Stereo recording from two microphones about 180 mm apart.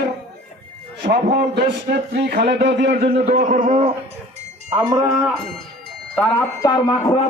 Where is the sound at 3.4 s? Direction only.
50° right (ahead or behind).